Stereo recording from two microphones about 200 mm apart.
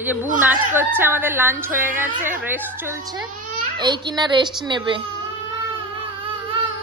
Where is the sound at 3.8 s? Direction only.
20° right (ahead or behind).